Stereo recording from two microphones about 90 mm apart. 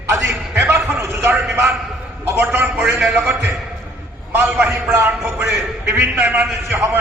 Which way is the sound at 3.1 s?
25° right (ahead or behind).